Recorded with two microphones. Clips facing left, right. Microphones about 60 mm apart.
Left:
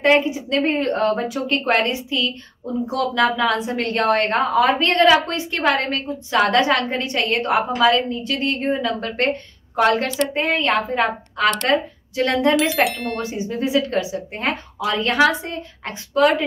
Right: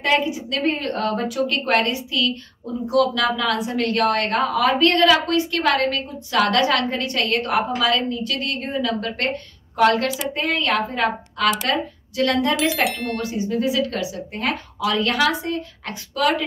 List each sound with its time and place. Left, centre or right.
0.0 s a woman's voice: left
12.5 s a sound: centre
13.2 s a woman's voice: left